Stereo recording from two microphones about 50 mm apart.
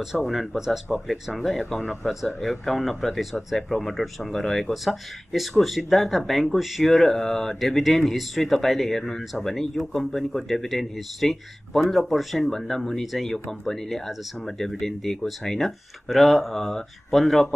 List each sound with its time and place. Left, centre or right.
0.0 s speech: centre